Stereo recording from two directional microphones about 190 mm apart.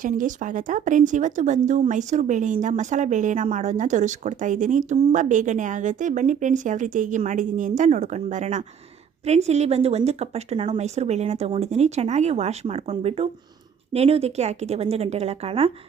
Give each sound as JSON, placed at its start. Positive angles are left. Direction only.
{"t": 0.0, "sound": "speech", "side_deg": -45}